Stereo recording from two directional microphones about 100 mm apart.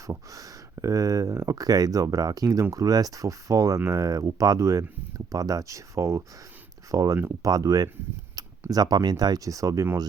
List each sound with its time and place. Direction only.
0.1 s speech: 35° right (ahead or behind)
8.4 s a sound: 40° right (ahead or behind)
8.7 s speech: 40° right (ahead or behind)